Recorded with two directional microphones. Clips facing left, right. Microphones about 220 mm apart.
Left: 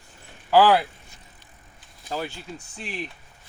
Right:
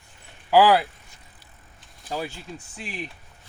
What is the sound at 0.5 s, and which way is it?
Speech, 10° right (ahead or behind).